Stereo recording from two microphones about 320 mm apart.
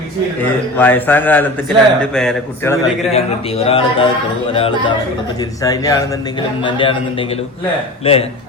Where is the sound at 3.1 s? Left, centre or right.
Centre.